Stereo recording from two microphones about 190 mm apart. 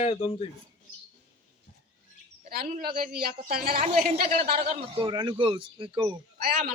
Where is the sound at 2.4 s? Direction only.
55° right (ahead or behind).